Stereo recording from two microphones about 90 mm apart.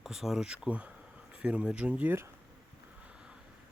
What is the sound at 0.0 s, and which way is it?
Speech, 5° right (ahead or behind).